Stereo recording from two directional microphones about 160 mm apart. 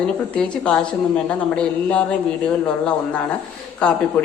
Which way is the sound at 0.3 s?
5° left (ahead or behind).